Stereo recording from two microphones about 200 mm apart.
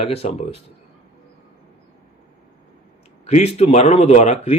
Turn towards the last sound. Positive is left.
turn(degrees=35)  # may be behind; listen again after turning